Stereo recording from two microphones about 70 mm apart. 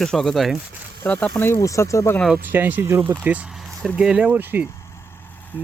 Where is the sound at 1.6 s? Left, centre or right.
Left.